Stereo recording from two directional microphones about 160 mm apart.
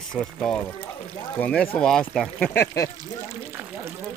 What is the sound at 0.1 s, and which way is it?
Speech, 5° left (ahead or behind).